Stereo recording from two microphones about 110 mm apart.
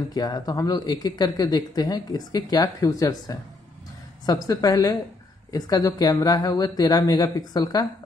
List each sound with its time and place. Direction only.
0.1 s speech: 40° left (ahead or behind)